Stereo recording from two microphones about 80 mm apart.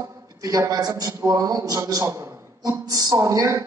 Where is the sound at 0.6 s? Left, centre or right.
Right.